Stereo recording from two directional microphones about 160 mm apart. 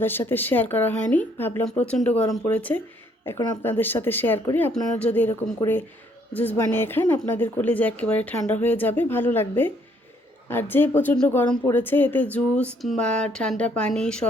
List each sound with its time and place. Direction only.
0.0 s a woman's voice: 15° left (ahead or behind)